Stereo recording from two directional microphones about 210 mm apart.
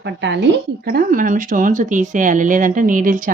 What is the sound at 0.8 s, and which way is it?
Speech, 45° right (ahead or behind).